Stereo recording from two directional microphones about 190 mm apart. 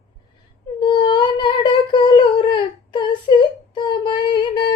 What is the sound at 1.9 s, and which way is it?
Humming, 25° left (ahead or behind).